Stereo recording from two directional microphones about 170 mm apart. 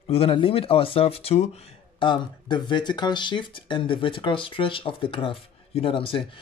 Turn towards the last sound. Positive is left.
turn(degrees=30)  # may be behind; listen again after turning